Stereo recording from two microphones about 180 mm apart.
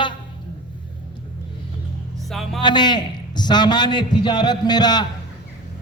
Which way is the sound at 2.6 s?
25° left (ahead or behind).